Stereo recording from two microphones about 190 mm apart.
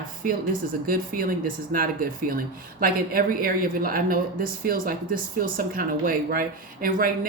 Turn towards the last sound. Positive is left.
turn(degrees=-50)  # may be behind; listen again after turning